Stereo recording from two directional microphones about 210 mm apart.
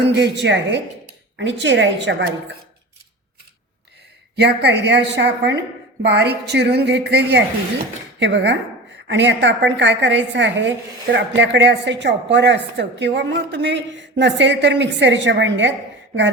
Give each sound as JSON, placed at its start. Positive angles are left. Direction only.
{"t": 0.0, "sound": "a woman's voice", "side_deg": -55}
{"t": 4.4, "sound": "a woman's voice", "side_deg": -55}